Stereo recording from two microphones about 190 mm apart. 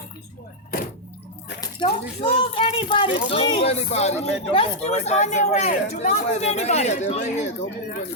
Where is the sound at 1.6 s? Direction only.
25° left (ahead or behind).